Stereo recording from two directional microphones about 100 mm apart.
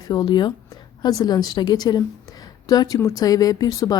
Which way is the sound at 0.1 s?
45° left (ahead or behind).